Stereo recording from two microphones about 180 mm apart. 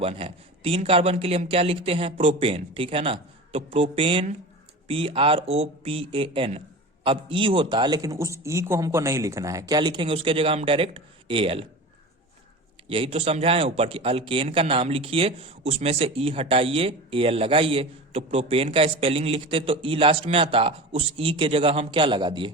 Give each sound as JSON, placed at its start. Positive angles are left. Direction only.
{"t": 0.0, "sound": "a man's voice", "side_deg": -30}
{"t": 12.9, "sound": "a man's voice", "side_deg": -30}